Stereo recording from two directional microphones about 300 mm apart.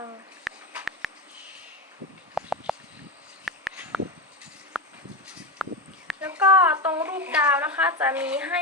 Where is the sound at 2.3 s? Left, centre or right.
Centre.